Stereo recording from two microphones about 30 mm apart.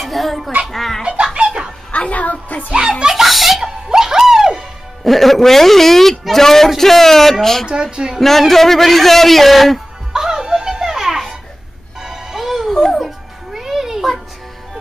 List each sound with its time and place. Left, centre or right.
0.0 s a sound: centre
1.0 s giggle: right
1.9 s a child's voice: left
2.7 s speech: right
3.2 s laughter: centre
3.6 s music: centre
5.0 s a man's voice: centre
7.6 s speech: right
8.2 s a man's voice: centre
10.1 s music: centre
12.7 s music: centre
13.0 s music: centre